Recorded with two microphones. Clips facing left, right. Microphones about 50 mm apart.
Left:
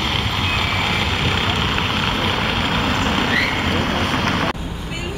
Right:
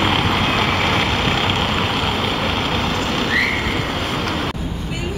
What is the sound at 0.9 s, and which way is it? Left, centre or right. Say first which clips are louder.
Vehicle: right 3 dB; right.